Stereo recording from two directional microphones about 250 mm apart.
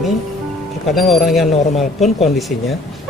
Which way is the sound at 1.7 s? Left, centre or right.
Left.